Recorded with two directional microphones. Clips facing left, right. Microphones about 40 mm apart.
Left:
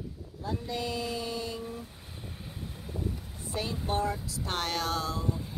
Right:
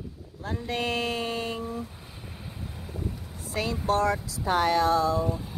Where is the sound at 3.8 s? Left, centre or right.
Right.